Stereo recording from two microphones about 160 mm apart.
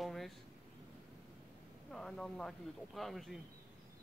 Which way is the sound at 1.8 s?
5° left (ahead or behind).